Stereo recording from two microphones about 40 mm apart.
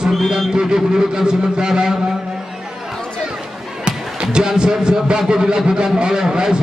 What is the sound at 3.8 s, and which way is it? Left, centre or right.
A man's voice, right.